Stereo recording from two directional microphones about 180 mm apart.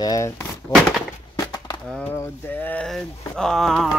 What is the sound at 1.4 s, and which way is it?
Skateboard, 20° left (ahead or behind).